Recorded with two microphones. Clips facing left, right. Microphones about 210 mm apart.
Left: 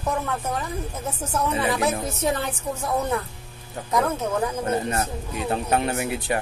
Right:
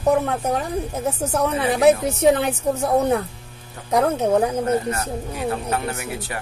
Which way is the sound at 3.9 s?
70° right (ahead or behind).